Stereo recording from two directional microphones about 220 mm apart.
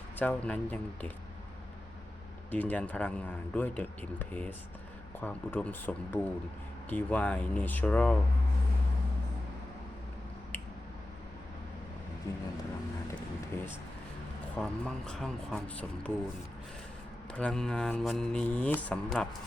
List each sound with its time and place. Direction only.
0.2 s a man's voice: 5° left (ahead or behind)
2.5 s a man's voice: 5° left (ahead or behind)
12.3 s a man's voice: 15° left (ahead or behind)
14.5 s speech: 5° left (ahead or behind)
17.3 s speech: 5° left (ahead or behind)